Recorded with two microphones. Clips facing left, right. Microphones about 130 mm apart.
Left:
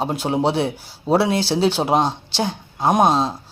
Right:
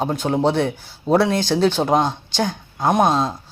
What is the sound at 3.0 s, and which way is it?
Speech, 30° left (ahead or behind).